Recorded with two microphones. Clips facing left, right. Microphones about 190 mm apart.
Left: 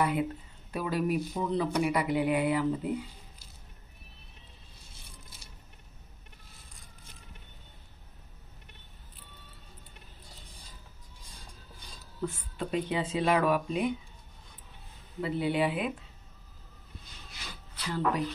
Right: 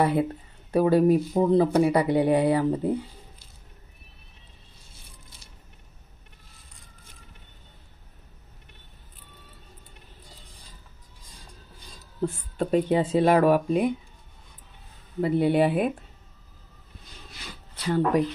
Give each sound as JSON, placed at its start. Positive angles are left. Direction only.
{"t": 0.0, "sound": "speech", "side_deg": -35}
{"t": 0.7, "sound": "speech", "side_deg": -50}
{"t": 0.9, "sound": "speech", "side_deg": -35}
{"t": 12.2, "sound": "speech", "side_deg": -45}
{"t": 15.1, "sound": "speech", "side_deg": -50}
{"t": 17.8, "sound": "speech", "side_deg": -50}